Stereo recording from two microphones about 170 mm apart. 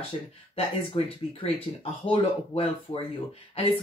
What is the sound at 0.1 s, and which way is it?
Speech, 30° left (ahead or behind).